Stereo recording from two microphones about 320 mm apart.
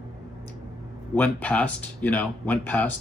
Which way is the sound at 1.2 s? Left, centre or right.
Centre.